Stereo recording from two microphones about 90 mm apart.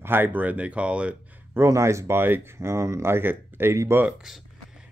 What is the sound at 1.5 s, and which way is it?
Speech, 35° right (ahead or behind).